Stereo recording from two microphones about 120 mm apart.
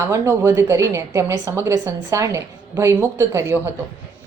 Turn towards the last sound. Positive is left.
turn(degrees=-20)  # may be behind; listen again after turning